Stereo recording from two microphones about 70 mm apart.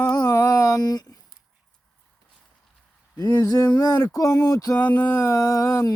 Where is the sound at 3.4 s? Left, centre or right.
Left.